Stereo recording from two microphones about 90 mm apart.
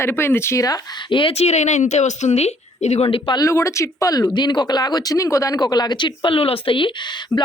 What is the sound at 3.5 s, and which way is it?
Speech, 35° left (ahead or behind).